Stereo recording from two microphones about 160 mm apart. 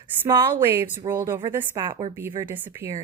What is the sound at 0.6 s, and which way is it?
Speech, 15° right (ahead or behind).